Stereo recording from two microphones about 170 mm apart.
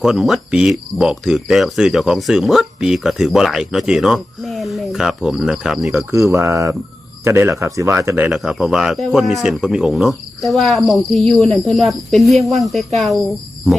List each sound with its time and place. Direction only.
0.0 s speech: centre (ahead or behind)
6.0 s speech: 15° right (ahead or behind); by 13.2 s centre (ahead or behind)